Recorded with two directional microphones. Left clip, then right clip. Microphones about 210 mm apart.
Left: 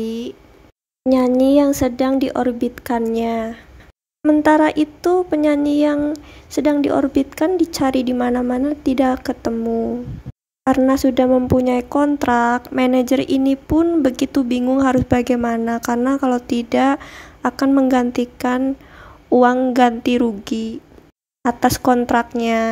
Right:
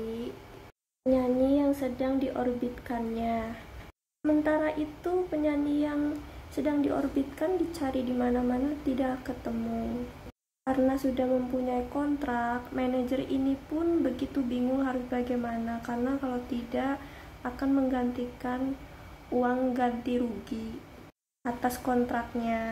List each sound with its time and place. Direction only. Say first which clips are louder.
1.0 s a woman's voice: left 11 dB; 55° left (ahead or behind)
10.6 s a woman's voice: left 12 dB; 45° left (ahead or behind)